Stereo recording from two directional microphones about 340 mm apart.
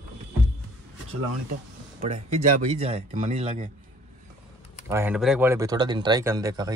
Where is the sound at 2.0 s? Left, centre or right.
Centre.